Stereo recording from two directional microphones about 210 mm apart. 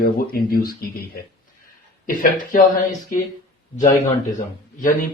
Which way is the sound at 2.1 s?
40° left (ahead or behind).